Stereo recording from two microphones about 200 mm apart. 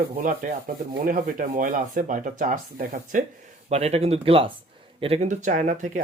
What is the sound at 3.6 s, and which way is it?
Speech, 30° right (ahead or behind).